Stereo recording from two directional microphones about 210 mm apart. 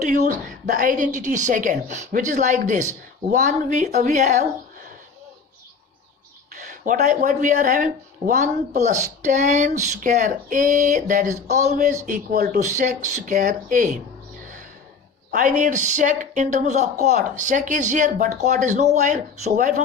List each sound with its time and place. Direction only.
0.0 s speech: 40° right (ahead or behind)
6.5 s speech: 40° right (ahead or behind)
15.3 s speech: 40° right (ahead or behind)